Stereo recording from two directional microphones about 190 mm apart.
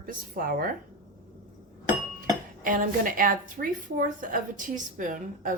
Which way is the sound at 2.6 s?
45° right (ahead or behind).